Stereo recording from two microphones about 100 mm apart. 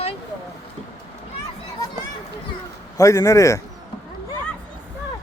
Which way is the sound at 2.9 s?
35° left (ahead or behind).